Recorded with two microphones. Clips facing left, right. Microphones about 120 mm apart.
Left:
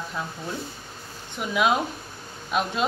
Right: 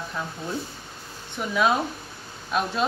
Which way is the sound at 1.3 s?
10° left (ahead or behind).